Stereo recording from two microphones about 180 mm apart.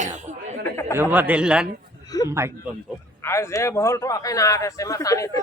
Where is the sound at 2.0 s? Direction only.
20° left (ahead or behind).